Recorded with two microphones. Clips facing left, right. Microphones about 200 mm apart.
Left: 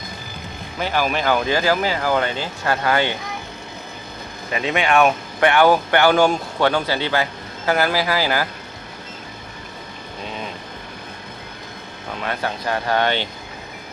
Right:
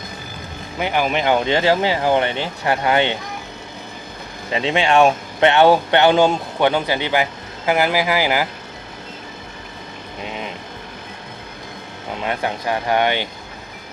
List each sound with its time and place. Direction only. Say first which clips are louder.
0.8 s speech: right 2 dB; 20° right (ahead or behind)
4.5 s speech: right 2 dB; 25° right (ahead or behind)
12.1 s speech: right 2 dB; 20° right (ahead or behind)